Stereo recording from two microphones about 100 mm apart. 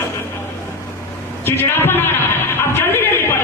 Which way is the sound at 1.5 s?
20° left (ahead or behind).